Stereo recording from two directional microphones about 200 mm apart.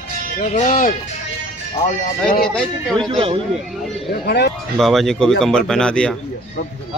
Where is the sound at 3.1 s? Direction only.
25° right (ahead or behind).